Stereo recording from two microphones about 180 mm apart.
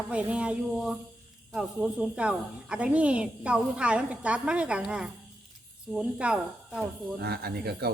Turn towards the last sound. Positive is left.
turn(degrees=-60)  # may be behind; listen again after turning